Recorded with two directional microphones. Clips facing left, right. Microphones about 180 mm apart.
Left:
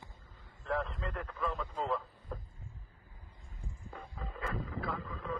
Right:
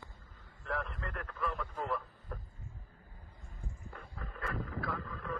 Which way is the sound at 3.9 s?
15° left (ahead or behind).